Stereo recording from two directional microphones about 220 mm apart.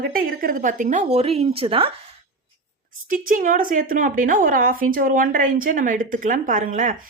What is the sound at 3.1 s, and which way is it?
A woman's voice, 40° right (ahead or behind).